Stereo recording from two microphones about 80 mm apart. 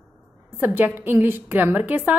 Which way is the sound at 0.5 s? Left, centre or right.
Right.